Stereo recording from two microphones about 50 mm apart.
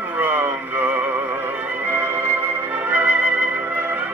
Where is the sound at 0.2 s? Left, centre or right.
Right.